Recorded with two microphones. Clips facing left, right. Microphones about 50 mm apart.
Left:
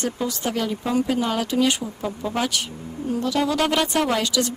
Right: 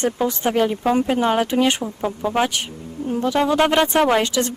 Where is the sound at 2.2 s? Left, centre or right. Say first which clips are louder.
Right 5 dB; right.